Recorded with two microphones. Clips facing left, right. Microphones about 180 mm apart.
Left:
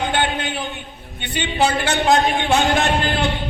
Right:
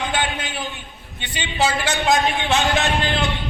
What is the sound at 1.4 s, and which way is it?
Speech, 55° left (ahead or behind).